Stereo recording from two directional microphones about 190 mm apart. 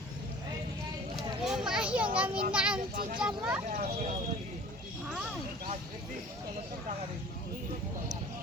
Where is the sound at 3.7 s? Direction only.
45° right (ahead or behind).